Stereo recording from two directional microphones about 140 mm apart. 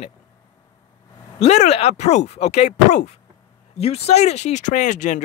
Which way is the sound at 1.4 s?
50° left (ahead or behind).